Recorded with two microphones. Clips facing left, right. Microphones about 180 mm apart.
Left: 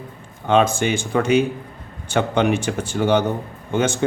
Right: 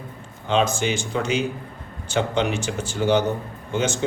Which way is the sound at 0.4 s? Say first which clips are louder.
Left 4 dB; 55° left (ahead or behind).